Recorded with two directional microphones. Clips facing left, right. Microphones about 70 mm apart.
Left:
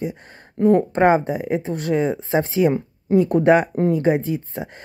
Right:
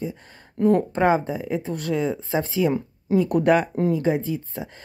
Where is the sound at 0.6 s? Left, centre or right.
Centre.